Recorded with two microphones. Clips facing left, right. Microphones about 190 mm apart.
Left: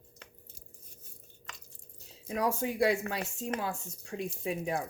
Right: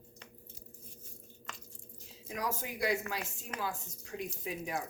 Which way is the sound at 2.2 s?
30° left (ahead or behind).